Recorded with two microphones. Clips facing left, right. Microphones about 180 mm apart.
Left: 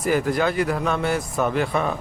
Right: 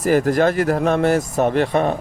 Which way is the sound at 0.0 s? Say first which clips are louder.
Right 5 dB; 40° right (ahead or behind).